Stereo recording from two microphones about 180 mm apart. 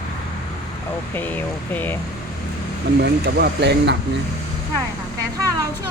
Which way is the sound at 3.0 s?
70° right (ahead or behind).